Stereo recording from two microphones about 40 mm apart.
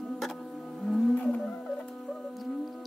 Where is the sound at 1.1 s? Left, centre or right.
Left.